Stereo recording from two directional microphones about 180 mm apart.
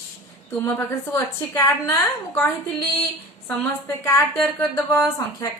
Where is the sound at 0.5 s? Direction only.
15° left (ahead or behind).